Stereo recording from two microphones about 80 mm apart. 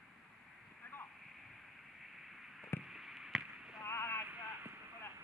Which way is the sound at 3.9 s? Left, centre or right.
Left.